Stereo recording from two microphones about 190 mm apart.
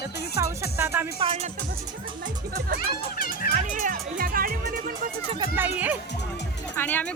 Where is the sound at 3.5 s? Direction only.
45° right (ahead or behind).